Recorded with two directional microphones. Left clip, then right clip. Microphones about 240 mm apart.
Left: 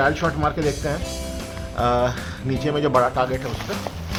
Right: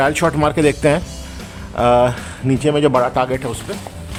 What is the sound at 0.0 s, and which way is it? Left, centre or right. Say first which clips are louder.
Speech: right 5 dB; right.